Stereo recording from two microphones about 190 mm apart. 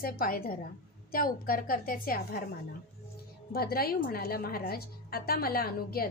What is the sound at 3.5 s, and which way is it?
A woman's voice, 55° left (ahead or behind).